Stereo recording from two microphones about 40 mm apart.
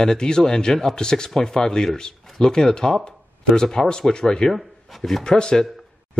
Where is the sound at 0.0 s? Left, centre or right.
Centre.